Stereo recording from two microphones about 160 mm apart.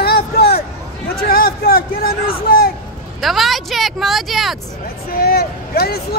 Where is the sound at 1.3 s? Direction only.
70° left (ahead or behind).